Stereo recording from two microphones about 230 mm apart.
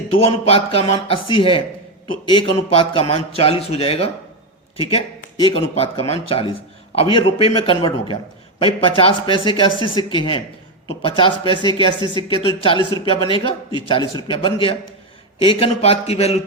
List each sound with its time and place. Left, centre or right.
0.2 s a man's voice: left